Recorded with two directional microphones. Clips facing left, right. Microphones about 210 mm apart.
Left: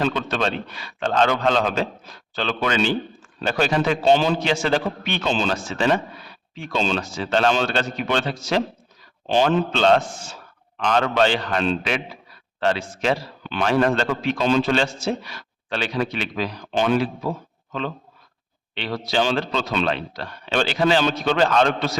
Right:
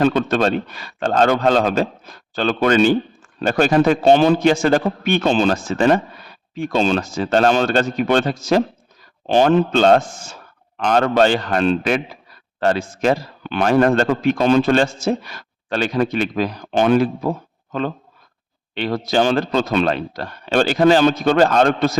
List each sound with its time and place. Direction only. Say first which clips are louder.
0.0 s a man's voice: right 7 dB; 50° right (ahead or behind)